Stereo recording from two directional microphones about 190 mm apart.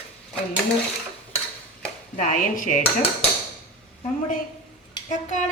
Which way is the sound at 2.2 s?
45° left (ahead or behind).